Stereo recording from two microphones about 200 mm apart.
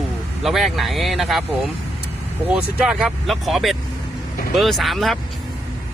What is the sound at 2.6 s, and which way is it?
Speech, 5° right (ahead or behind).